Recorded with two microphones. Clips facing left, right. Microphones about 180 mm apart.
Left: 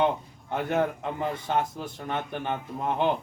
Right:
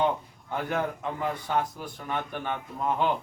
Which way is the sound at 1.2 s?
25° left (ahead or behind).